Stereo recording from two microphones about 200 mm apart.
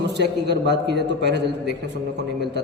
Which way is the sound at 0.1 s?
60° right (ahead or behind).